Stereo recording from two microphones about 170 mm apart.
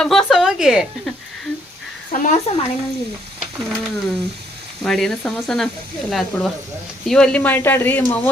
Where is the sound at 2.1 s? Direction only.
45° left (ahead or behind).